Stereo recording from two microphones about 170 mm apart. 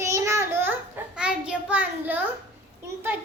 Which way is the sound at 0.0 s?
15° right (ahead or behind).